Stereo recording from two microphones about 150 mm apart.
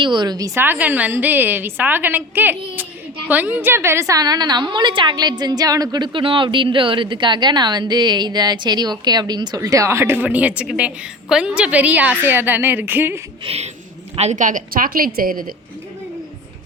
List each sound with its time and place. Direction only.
0.0 s a woman's voice: 30° right (ahead or behind); by 13.2 s 15° right (ahead or behind)
13.4 s a sound: 40° right (ahead or behind)
14.2 s a woman's voice: 50° right (ahead or behind); by 15.5 s 70° right (ahead or behind)